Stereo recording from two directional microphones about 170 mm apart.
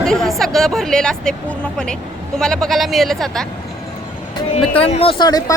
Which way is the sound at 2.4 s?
5° left (ahead or behind).